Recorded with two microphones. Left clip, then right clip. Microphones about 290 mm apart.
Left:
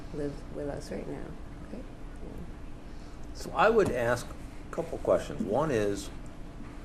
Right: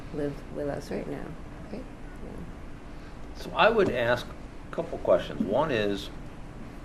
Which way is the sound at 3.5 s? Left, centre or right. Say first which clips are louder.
Right 2 dB; left.